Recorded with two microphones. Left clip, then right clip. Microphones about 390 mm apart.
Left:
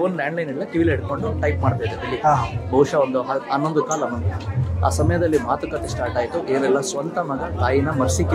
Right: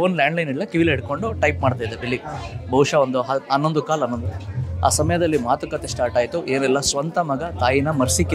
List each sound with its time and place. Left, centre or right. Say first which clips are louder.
0.0 s speech: right 3 dB; right
2.7 s speech: right 1 dB; right